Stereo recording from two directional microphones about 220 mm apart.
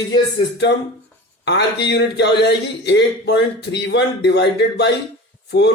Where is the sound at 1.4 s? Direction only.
50° left (ahead or behind).